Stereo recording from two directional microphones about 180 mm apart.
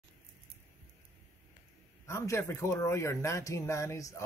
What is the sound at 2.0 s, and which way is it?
A man's voice, 15° left (ahead or behind).